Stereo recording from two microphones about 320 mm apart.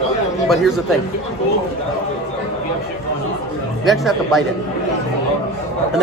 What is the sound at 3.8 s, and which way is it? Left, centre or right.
Speech, centre.